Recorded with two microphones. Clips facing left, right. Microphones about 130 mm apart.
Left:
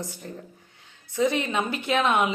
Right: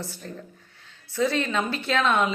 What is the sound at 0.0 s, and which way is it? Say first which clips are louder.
A woman's voice: even; 15° left (ahead or behind).